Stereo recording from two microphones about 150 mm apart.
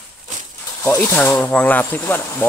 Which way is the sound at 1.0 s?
10° left (ahead or behind).